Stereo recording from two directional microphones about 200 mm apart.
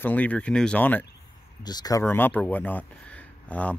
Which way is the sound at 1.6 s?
20° left (ahead or behind).